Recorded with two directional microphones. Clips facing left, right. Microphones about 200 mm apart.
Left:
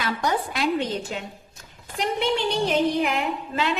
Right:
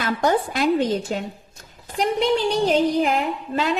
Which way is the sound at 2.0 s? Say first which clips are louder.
Right 4 dB; 40° right (ahead or behind).